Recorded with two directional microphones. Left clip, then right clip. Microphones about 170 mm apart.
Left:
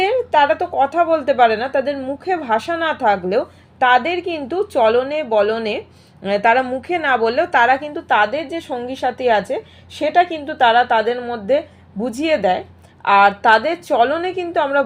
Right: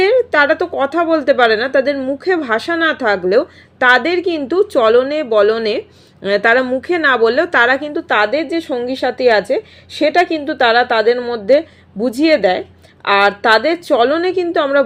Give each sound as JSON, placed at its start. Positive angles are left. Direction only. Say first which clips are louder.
{"t": 0.0, "sound": "a woman's voice", "louder": "right 3 dB", "side_deg": -40}